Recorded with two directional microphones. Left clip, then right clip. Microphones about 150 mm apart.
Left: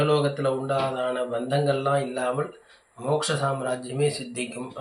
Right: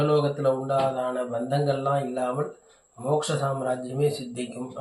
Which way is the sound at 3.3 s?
Centre (ahead or behind).